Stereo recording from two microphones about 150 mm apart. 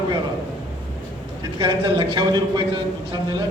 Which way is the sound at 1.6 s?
30° right (ahead or behind).